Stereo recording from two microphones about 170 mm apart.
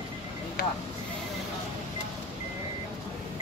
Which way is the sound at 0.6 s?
80° left.